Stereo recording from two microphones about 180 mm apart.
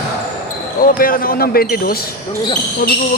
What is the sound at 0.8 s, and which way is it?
Speech, 50° left (ahead or behind).